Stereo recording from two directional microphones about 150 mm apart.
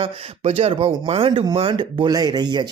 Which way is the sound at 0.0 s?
40° right (ahead or behind).